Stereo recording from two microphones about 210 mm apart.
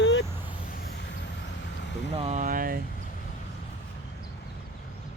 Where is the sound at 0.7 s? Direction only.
45° left (ahead or behind).